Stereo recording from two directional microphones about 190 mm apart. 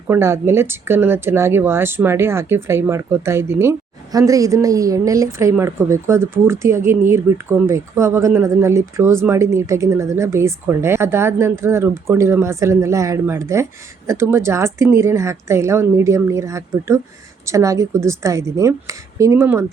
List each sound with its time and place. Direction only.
0.1 s speech: 15° right (ahead or behind)